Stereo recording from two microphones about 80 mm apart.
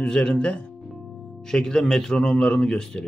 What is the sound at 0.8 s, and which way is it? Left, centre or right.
Speech, centre.